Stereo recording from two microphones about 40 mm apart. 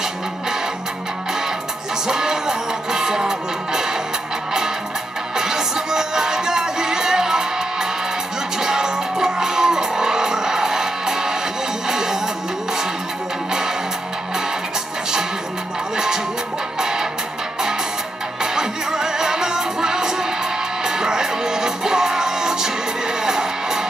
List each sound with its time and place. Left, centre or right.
2.0 s music: centre
5.3 s music: centre
16.8 s music: centre
18.4 s music: centre